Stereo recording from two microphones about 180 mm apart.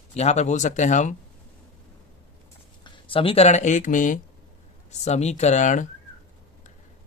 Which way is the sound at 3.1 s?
30° left (ahead or behind).